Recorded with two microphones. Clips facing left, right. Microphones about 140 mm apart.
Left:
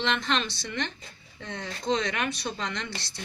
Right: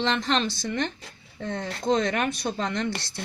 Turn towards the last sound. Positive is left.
turn(degrees=-55)  # may be behind; listen again after turning